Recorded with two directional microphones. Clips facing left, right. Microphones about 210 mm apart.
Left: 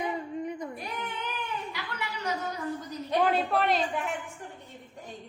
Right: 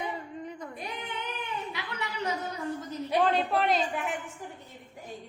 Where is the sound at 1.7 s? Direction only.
20° right (ahead or behind).